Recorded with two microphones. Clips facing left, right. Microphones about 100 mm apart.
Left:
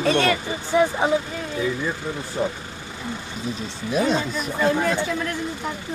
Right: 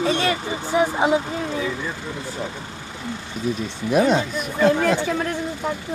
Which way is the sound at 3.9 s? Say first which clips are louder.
Right 4 dB; 60° right (ahead or behind).